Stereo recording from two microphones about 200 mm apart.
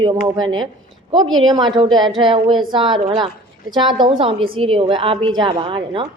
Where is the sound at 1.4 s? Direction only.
20° right (ahead or behind).